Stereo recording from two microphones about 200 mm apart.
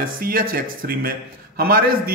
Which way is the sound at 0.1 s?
45° right (ahead or behind).